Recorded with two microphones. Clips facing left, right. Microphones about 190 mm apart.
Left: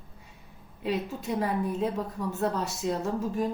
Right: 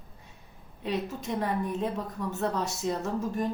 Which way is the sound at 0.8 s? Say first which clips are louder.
Left 1 dB; 5° left (ahead or behind).